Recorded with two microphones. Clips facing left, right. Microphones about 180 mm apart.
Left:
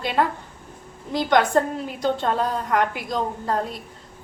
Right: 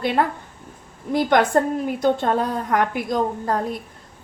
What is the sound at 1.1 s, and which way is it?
A woman's voice, 55° right (ahead or behind).